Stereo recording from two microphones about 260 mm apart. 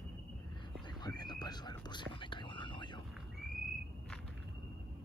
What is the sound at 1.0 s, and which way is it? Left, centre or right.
Whispering, centre.